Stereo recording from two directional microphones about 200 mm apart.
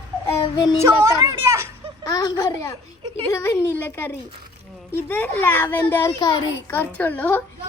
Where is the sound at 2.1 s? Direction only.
15° left (ahead or behind).